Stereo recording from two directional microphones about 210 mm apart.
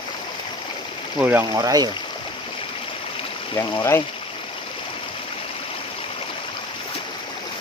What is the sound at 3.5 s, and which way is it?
Speech, 15° left (ahead or behind).